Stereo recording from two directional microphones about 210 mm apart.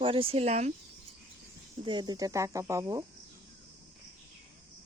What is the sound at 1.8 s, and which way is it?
Speech, 20° right (ahead or behind).